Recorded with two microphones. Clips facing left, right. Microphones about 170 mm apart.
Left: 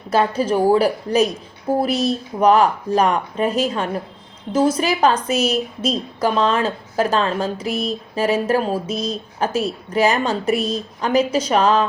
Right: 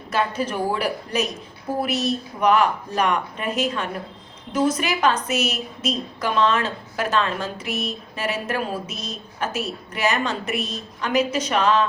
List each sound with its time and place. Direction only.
0.1 s a woman's voice: 30° left (ahead or behind)